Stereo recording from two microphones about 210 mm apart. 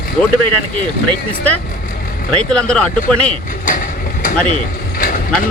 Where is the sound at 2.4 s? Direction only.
5° left (ahead or behind).